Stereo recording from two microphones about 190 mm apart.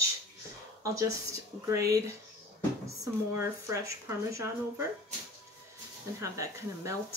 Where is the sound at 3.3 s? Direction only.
15° right (ahead or behind).